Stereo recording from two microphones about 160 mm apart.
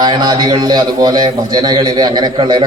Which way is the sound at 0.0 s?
25° right (ahead or behind).